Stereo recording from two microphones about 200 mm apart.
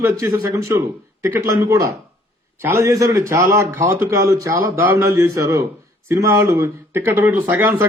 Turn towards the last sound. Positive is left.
turn(degrees=-10)  # may be behind; listen again after turning